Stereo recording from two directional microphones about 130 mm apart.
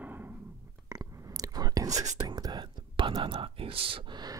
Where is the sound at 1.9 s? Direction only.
65° right (ahead or behind).